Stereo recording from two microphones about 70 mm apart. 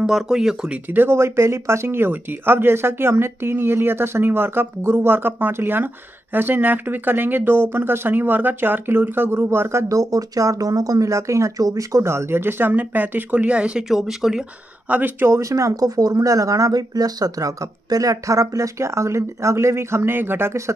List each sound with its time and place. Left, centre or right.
0.0 s speech: centre
0.8 s speech: right; by 13.8 s centre
13.8 s speech: centre
14.9 s speech: right
15.2 s speech: right